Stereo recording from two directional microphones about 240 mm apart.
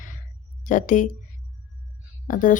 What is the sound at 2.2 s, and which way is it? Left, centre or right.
Speech, left.